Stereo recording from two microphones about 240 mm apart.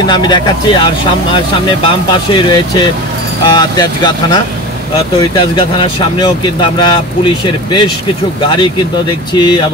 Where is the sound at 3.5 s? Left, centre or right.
Centre.